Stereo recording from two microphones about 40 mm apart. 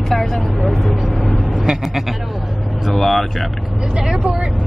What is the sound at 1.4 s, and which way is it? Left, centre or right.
Bleat, centre.